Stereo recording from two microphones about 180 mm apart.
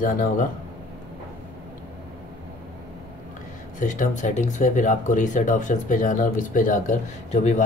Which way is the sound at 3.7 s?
45° left (ahead or behind).